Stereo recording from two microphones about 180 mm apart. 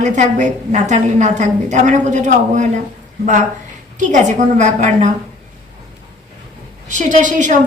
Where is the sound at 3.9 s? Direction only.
45° right (ahead or behind).